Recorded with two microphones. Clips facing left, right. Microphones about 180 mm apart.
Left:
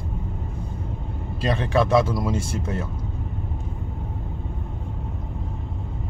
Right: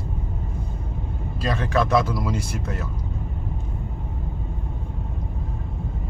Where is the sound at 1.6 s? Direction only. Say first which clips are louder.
Left 1 dB; 25° left (ahead or behind).